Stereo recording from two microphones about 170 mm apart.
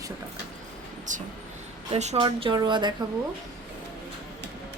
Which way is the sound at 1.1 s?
50° right (ahead or behind).